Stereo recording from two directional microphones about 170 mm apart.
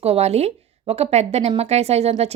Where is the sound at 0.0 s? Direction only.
40° right (ahead or behind).